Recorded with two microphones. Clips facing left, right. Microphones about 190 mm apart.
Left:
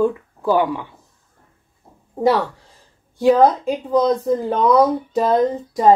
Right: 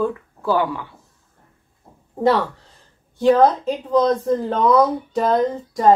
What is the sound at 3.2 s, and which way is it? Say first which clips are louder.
Speech: left 1 dB; 5° left (ahead or behind).